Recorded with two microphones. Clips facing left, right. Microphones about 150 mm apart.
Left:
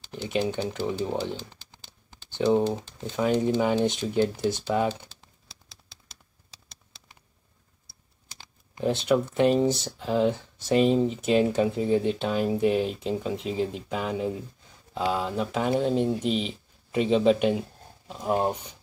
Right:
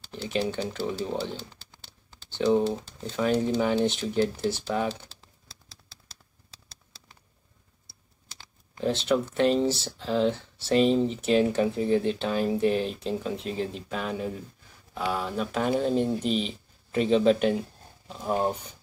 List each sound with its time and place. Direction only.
0.1 s speech: 20° left (ahead or behind)
9.0 s speech: 15° left (ahead or behind)
15.7 s speech: 5° left (ahead or behind)